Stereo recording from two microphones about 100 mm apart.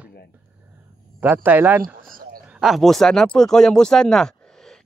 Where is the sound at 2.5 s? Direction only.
5° right (ahead or behind).